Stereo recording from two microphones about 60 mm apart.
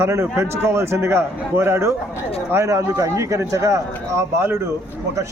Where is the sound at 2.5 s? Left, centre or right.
Right.